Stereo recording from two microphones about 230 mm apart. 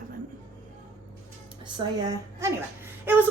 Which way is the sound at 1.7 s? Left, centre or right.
Centre.